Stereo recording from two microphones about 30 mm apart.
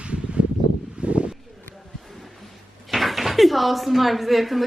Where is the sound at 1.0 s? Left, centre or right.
Right.